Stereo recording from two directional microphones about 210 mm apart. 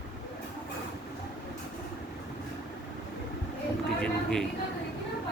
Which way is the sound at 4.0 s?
5° left (ahead or behind).